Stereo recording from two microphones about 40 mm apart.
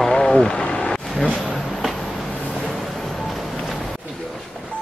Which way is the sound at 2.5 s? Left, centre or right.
Centre.